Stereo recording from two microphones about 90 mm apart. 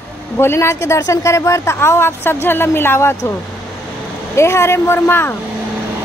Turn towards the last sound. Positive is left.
turn(degrees=25)  # may be behind; listen again after turning